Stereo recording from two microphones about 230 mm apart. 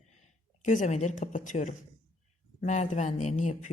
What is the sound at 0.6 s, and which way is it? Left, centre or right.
Speech, left.